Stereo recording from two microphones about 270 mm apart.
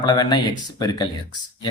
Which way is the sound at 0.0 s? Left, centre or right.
Centre.